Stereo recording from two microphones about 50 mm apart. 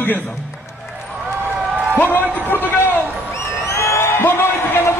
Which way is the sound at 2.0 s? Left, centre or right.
Left.